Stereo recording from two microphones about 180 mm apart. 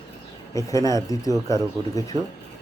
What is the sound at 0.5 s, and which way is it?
Speech, 15° left (ahead or behind).